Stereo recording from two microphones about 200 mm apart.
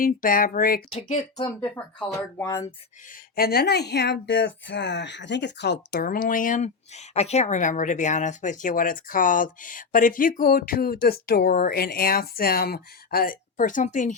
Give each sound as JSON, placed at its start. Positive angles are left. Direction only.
{"t": 0.0, "sound": "speech", "side_deg": 45}
{"t": 0.9, "sound": "speech", "side_deg": 35}
{"t": 1.6, "sound": "speech", "side_deg": 10}
{"t": 3.1, "sound": "speech", "side_deg": 50}